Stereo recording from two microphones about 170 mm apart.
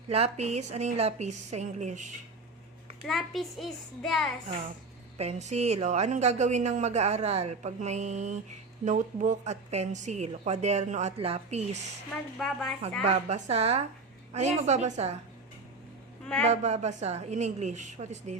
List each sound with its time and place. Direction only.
0.1 s a woman's voice: 40° right (ahead or behind)
3.1 s a child's voice: centre (ahead or behind)
5.1 s a woman's voice: 40° right (ahead or behind)
12.4 s a child's voice: centre (ahead or behind)
13.0 s a woman's voice: 40° right (ahead or behind)
16.4 s a woman's voice: 40° right (ahead or behind)